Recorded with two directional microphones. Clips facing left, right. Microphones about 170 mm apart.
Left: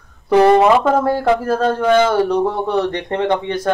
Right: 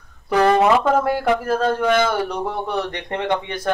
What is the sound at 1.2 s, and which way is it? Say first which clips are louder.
Speech: left 3 dB; 25° left (ahead or behind).